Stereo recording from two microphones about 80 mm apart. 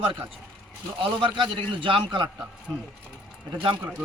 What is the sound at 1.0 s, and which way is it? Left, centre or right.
A man's voice, right.